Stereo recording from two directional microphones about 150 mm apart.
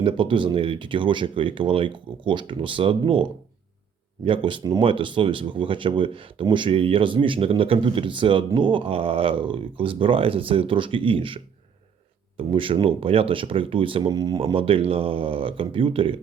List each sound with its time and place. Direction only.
0.0 s speech: 35° right (ahead or behind)
4.3 s speech: 35° right (ahead or behind)